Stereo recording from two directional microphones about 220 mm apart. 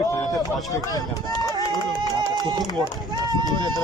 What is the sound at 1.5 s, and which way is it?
Run, 20° right (ahead or behind).